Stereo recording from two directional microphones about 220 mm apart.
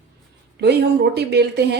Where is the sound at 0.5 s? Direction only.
50° right (ahead or behind).